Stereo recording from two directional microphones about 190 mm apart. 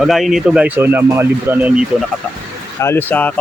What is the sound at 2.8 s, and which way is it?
Speech, 10° left (ahead or behind).